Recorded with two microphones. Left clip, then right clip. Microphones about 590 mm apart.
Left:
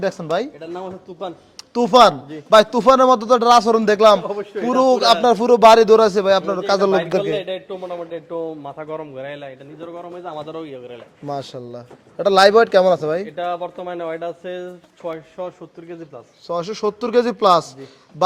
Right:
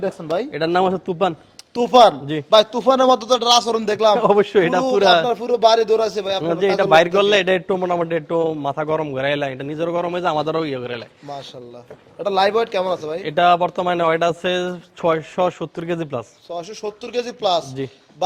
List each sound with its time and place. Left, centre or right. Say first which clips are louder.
0.0 s speech: left 1 dB; centre
0.6 s a man's voice: right 13 dB; right
1.7 s a man's voice: even; left
4.3 s a man's voice: right 11 dB; right
4.8 s a man's voice: left 5 dB; left
7.3 s speech: right 7 dB; right
9.7 s a man's voice: right 13 dB; right
11.3 s speech: left 7 dB; left
13.2 s speech: right 9 dB; right
16.5 s speech: left 8 dB; left